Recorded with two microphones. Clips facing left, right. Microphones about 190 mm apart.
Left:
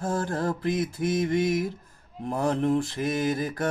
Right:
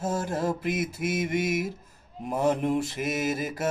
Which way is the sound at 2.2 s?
20° right (ahead or behind).